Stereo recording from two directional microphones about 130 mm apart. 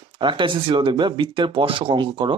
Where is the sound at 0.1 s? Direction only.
40° right (ahead or behind).